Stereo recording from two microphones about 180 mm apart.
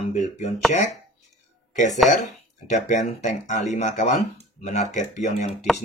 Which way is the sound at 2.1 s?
45° left (ahead or behind).